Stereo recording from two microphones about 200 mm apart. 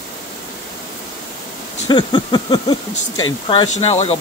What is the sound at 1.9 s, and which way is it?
Speech, 20° left (ahead or behind).